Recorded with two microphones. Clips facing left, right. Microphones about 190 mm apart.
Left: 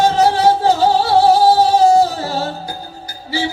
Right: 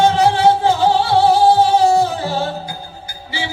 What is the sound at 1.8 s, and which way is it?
Music, 40° left (ahead or behind).